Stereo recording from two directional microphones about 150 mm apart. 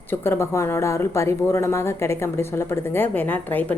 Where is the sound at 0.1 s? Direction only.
15° left (ahead or behind).